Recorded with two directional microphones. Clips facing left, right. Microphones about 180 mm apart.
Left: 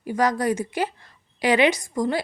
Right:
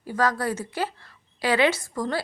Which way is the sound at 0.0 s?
15° left (ahead or behind).